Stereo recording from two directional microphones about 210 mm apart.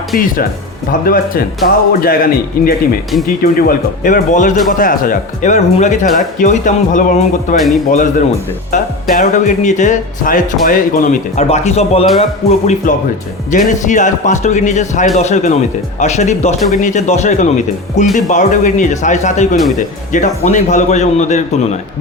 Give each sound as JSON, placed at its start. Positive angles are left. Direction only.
{"t": 0.1, "sound": "speech", "side_deg": 45}
{"t": 8.7, "sound": "speech", "side_deg": 35}